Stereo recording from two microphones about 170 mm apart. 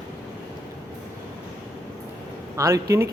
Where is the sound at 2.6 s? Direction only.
20° right (ahead or behind).